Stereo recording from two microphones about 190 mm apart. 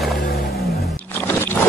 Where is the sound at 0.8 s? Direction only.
10° left (ahead or behind).